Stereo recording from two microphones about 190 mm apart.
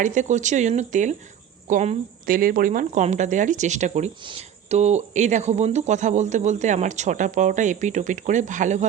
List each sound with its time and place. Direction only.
0.0 s a woman's voice: 40° right (ahead or behind)